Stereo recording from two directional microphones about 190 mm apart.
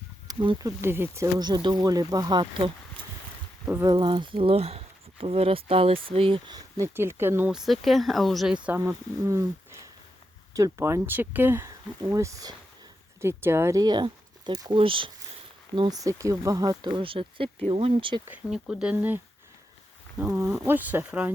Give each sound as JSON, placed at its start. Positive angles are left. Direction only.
{"t": 0.3, "sound": "speech", "side_deg": -20}
{"t": 3.8, "sound": "speech", "side_deg": -25}
{"t": 6.7, "sound": "speech", "side_deg": -15}
{"t": 10.5, "sound": "speech", "side_deg": -15}
{"t": 18.3, "sound": "speech", "side_deg": -5}